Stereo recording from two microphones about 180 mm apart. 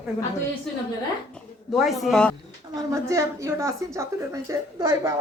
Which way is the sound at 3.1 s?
15° right (ahead or behind).